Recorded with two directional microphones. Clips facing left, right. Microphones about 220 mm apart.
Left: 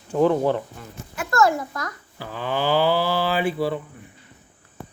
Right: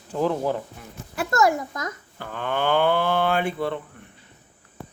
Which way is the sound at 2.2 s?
5° left (ahead or behind).